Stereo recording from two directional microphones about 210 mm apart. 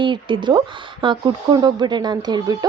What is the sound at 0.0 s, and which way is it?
A woman's voice, 25° right (ahead or behind).